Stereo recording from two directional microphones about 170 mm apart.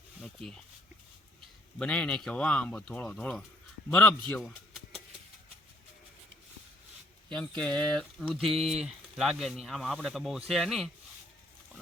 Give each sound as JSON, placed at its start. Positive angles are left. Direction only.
{"t": 0.2, "sound": "speech", "side_deg": 5}
{"t": 1.8, "sound": "speech", "side_deg": 5}
{"t": 7.3, "sound": "speech", "side_deg": 5}